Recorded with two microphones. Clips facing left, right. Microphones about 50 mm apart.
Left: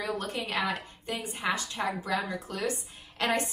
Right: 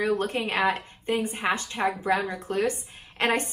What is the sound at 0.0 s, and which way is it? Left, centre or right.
A woman's voice, right.